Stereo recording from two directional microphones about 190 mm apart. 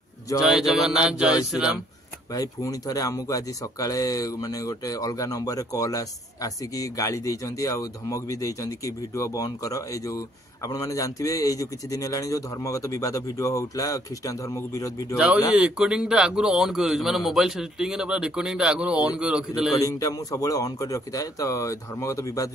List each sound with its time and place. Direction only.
0.4 s a man's voice: centre (ahead or behind)
2.3 s speech: 20° left (ahead or behind)
15.1 s a man's voice: 5° right (ahead or behind)
19.8 s speech: 20° left (ahead or behind)